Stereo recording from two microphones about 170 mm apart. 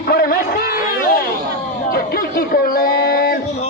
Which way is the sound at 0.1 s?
60° left (ahead or behind).